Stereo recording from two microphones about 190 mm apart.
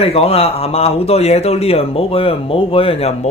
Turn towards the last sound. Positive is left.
turn(degrees=30)  # may be behind; listen again after turning